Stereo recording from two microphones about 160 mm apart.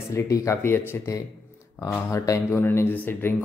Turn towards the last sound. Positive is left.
turn(degrees=10)  # may be behind; listen again after turning